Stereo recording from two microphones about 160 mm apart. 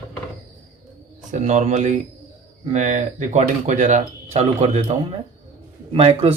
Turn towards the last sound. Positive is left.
turn(degrees=-40)  # may be behind; listen again after turning